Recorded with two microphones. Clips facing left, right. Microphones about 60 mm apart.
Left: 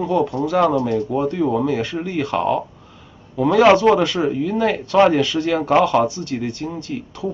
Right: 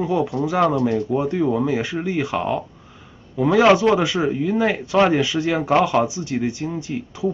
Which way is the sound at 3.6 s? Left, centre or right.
Centre.